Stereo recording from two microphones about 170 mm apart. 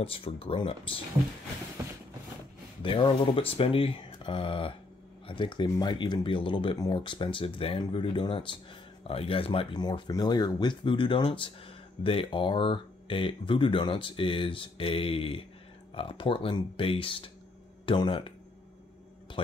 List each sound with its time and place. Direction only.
0.0 s speech: 30° left (ahead or behind)
2.8 s speech: 30° left (ahead or behind)
19.4 s speech: 30° left (ahead or behind)